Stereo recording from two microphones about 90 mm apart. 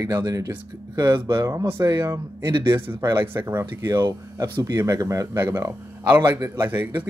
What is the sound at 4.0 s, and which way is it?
Speech, 50° right (ahead or behind).